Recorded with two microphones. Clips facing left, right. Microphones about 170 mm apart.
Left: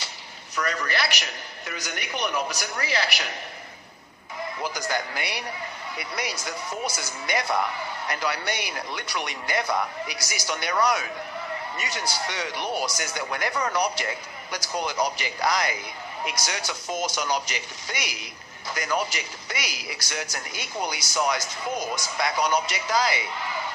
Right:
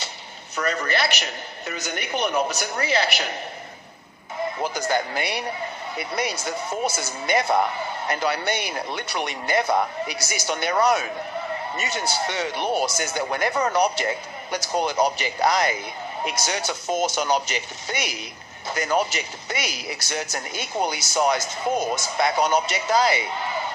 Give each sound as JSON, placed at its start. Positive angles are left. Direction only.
{"t": 0.5, "sound": "speech", "side_deg": -25}
{"t": 4.6, "sound": "speech", "side_deg": -25}